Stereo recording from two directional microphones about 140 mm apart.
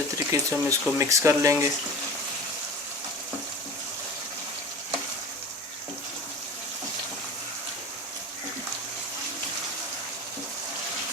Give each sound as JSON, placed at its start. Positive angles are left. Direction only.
{"t": 0.3, "sound": "speech", "side_deg": -20}